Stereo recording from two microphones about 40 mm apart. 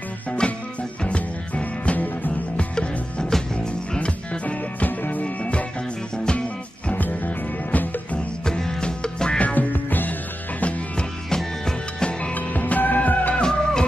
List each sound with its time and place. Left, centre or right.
0.4 s music: left
1.0 s music: left
2.5 s music: left
3.9 s music: left
4.8 s music: left
5.2 s music: left
6.9 s music: left
8.5 s music: centre
9.4 s music: left
9.7 s music: left
11.0 s music: centre
12.4 s music: left
13.3 s music: centre